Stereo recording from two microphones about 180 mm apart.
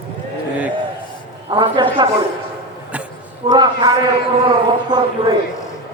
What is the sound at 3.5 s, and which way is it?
Speech, 25° right (ahead or behind).